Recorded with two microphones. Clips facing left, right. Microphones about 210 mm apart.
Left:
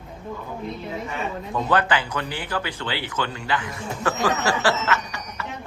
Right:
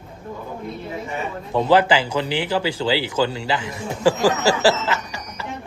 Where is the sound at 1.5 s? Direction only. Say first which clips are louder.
Right 6 dB; 30° right (ahead or behind).